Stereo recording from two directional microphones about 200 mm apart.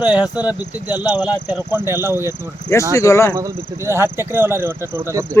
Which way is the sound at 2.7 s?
15° left (ahead or behind).